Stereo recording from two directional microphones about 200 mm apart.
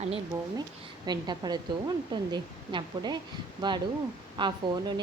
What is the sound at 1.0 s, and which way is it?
A woman's voice, 20° right (ahead or behind).